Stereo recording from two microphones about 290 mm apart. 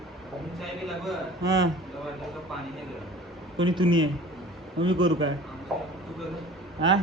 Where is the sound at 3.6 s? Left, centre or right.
Centre.